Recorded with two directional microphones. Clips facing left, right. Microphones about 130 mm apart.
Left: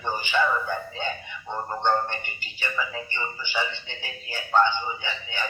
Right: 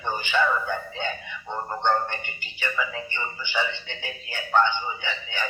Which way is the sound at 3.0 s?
15° right (ahead or behind).